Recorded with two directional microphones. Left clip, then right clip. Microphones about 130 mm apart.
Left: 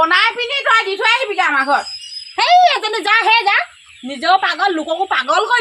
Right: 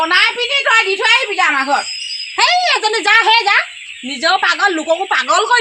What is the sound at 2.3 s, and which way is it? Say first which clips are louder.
A woman's voice: left 2 dB; 45° left (ahead or behind).